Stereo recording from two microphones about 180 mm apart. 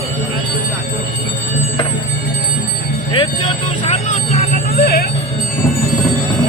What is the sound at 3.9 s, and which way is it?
Music, 40° left (ahead or behind).